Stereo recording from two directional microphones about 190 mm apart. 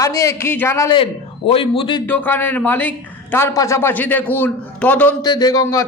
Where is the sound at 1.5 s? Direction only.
30° left (ahead or behind).